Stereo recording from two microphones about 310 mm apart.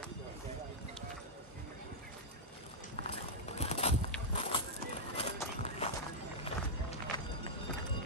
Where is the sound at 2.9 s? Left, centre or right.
Centre.